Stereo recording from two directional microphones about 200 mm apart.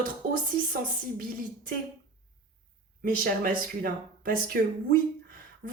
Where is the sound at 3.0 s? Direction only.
45° right (ahead or behind).